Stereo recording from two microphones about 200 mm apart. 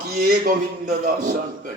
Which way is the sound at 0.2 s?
45° right (ahead or behind).